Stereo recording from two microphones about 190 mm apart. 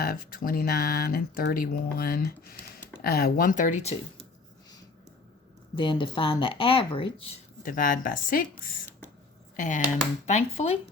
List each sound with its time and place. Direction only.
0.0 s speech: 50° left (ahead or behind)
5.7 s speech: 25° left (ahead or behind)
7.6 s speech: 45° left (ahead or behind)